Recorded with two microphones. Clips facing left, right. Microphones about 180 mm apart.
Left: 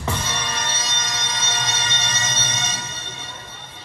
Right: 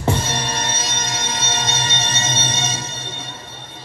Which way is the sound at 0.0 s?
30° right (ahead or behind).